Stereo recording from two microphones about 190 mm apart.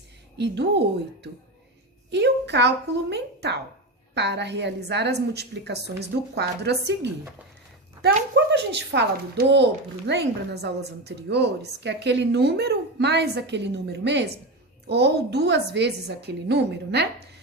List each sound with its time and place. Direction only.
0.3 s a woman's voice: 65° right (ahead or behind)
2.0 s a woman's voice: 65° right (ahead or behind)